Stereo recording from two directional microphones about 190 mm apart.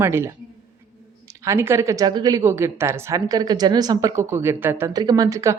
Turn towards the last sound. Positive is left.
turn(degrees=-15)  # may be behind; listen again after turning